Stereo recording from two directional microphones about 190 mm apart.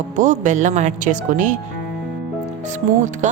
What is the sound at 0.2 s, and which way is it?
A woman's voice, 40° right (ahead or behind).